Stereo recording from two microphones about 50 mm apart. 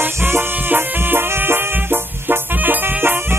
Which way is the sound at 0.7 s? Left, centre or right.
Right.